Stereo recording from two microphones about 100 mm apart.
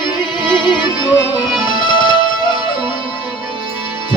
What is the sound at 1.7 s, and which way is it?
Music, 45° left (ahead or behind).